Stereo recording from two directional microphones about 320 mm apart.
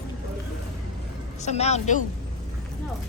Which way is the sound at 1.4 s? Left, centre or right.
Left.